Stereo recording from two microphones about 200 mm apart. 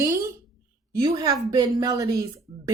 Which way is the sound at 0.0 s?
15° right (ahead or behind).